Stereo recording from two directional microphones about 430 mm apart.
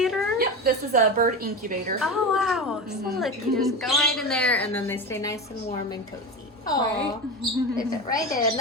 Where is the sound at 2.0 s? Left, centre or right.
Centre.